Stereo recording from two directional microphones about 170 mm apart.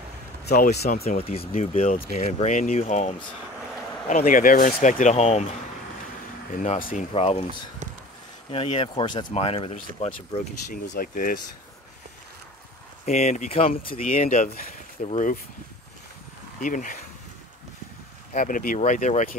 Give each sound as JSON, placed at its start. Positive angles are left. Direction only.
{"t": 0.5, "sound": "speech", "side_deg": 65}
{"t": 1.5, "sound": "speech", "side_deg": 40}
{"t": 6.5, "sound": "speech", "side_deg": 50}
{"t": 7.2, "sound": "speech", "side_deg": 35}
{"t": 8.5, "sound": "speech", "side_deg": 30}
{"t": 10.7, "sound": "speech", "side_deg": 55}
{"t": 13.0, "sound": "speech", "side_deg": 45}
{"t": 14.0, "sound": "speech", "side_deg": 50}
{"t": 16.6, "sound": "speech", "side_deg": 50}
{"t": 18.3, "sound": "speech", "side_deg": 50}